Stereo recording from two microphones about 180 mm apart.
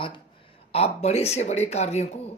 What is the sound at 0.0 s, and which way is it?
Speech, 30° left (ahead or behind).